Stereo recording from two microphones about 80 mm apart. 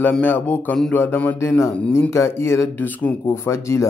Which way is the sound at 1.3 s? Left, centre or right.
Left.